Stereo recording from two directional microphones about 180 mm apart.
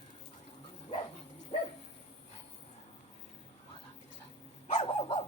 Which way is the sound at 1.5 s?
35° left (ahead or behind).